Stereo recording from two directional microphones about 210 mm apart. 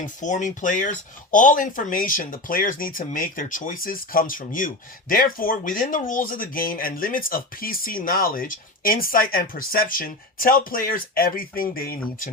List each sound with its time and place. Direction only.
0.0 s speech: 35° left (ahead or behind)